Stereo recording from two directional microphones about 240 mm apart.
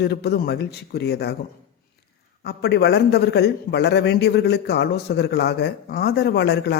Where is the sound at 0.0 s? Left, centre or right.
Left.